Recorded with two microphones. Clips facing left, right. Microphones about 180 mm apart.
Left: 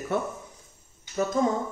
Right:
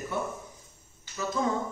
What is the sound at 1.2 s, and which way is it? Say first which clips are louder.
Speech: left 7 dB; 55° left (ahead or behind).